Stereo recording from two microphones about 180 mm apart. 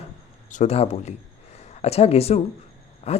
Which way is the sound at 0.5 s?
40° left (ahead or behind).